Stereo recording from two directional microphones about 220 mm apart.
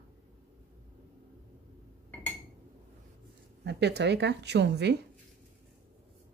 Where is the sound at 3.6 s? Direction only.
50° right (ahead or behind).